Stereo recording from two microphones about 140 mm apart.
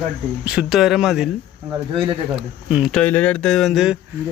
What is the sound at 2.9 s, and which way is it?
Speech, 10° left (ahead or behind).